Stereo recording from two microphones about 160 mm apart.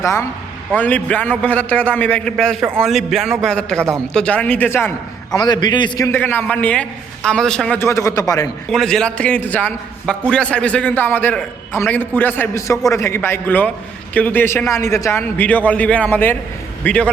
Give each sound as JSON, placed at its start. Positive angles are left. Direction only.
{"t": 0.0, "sound": "a man's voice", "side_deg": 15}
{"t": 5.4, "sound": "a man's voice", "side_deg": 25}
{"t": 6.1, "sound": "a man's voice", "side_deg": 15}
{"t": 8.7, "sound": "a man's voice", "side_deg": 5}